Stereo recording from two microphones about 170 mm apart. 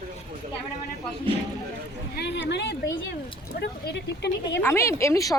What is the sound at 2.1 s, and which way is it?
Speech, 90° left.